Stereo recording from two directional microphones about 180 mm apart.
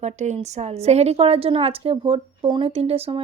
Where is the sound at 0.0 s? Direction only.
40° right (ahead or behind).